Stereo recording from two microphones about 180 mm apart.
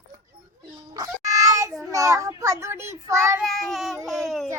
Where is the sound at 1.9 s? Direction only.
15° right (ahead or behind).